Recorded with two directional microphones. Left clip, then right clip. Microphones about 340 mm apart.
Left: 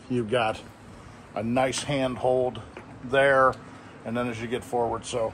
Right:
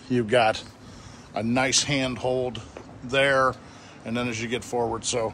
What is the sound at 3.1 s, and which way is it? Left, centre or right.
Speech, centre.